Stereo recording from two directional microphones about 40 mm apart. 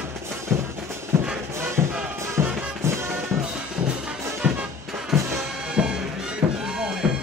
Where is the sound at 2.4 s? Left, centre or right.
Right.